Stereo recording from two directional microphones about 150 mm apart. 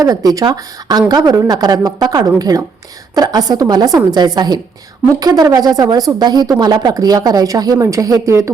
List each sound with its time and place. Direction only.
0.0 s a woman's voice: 25° right (ahead or behind)